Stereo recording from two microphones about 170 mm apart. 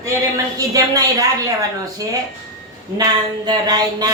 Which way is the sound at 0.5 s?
20° right (ahead or behind).